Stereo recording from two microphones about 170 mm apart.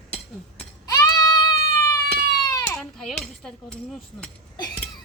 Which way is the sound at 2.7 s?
5° left (ahead or behind).